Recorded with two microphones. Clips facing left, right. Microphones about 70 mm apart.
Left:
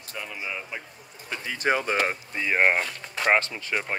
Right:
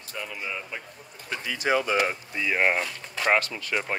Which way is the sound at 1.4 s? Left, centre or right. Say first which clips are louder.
Even; left.